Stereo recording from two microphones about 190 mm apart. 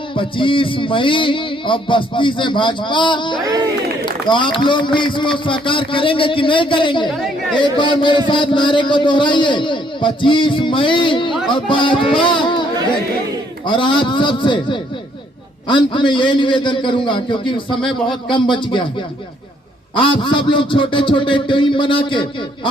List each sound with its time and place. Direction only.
0.2 s a man's voice: 25° left (ahead or behind)
13.7 s a man's voice: 25° left (ahead or behind)
20.0 s a man's voice: 25° left (ahead or behind)